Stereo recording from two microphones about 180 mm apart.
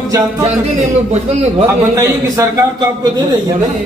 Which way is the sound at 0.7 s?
40° right (ahead or behind).